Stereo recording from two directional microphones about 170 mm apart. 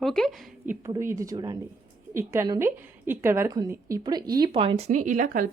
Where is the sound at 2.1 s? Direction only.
15° right (ahead or behind).